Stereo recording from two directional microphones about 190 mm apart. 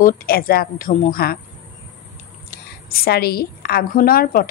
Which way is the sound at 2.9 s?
55° left (ahead or behind).